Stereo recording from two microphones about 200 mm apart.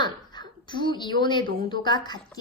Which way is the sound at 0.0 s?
20° left (ahead or behind).